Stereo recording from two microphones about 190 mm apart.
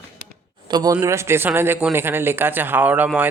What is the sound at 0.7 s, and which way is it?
Speech, 20° right (ahead or behind).